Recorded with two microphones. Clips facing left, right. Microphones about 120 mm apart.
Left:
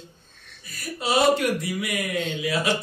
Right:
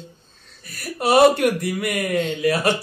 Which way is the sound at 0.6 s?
60° right (ahead or behind).